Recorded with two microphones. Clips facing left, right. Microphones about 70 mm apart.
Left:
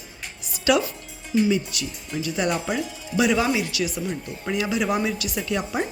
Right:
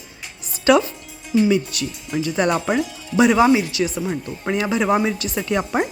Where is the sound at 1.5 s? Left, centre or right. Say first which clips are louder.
Right 5 dB; right.